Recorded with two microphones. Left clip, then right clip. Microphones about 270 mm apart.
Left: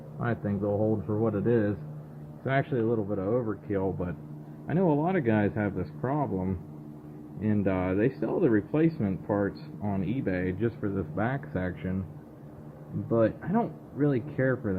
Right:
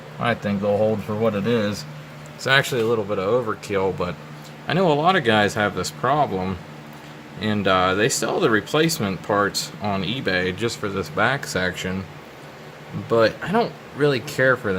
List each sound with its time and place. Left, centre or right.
0.2 s speech: centre
7.4 s speech: right
13.1 s speech: centre